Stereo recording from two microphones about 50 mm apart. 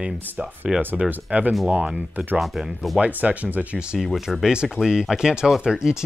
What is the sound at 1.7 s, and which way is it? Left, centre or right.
Speech, right.